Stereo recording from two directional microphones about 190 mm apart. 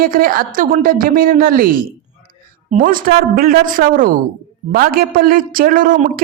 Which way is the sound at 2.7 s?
45° right (ahead or behind).